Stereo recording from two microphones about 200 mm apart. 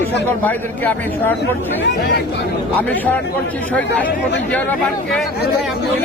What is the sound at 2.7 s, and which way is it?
Speech, 10° left (ahead or behind).